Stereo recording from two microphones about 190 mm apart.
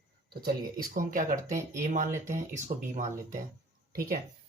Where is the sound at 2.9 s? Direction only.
40° right (ahead or behind).